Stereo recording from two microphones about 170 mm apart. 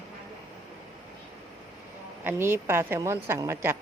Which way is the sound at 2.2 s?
15° right (ahead or behind).